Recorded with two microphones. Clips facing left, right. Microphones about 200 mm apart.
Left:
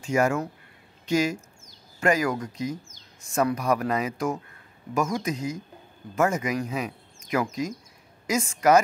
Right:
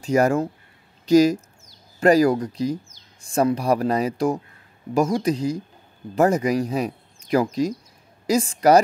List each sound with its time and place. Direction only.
0.0 s speech: 35° right (ahead or behind)